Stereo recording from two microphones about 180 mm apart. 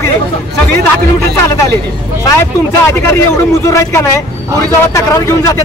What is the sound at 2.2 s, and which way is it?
Speech, 15° left (ahead or behind).